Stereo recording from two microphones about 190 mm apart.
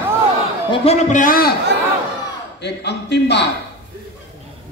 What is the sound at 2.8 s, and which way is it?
Speech, 65° left (ahead or behind).